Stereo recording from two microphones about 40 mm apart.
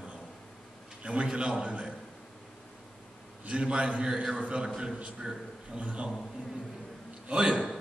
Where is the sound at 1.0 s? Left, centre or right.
Right.